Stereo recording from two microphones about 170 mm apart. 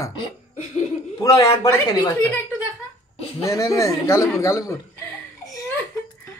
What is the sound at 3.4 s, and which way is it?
A man's voice, 20° left (ahead or behind).